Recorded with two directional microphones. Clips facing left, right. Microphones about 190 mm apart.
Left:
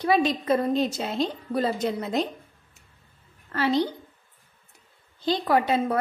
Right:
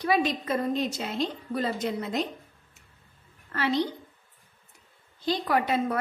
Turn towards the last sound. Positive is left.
turn(degrees=30)  # may be behind; listen again after turning